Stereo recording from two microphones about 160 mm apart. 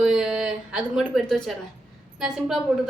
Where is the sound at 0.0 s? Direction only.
Centre (ahead or behind).